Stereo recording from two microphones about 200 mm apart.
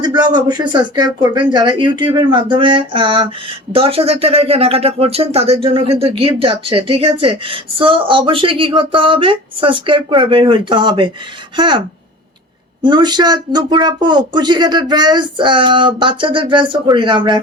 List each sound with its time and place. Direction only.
0.0 s speech: 20° right (ahead or behind)
12.8 s speech: 20° right (ahead or behind)